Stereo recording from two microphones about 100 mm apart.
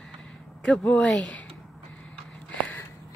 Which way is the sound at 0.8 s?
10° left (ahead or behind).